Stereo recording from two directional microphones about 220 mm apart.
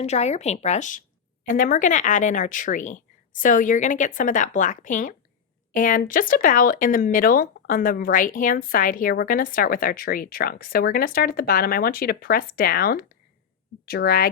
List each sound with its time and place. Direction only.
0.0 s a woman's voice: 30° left (ahead or behind)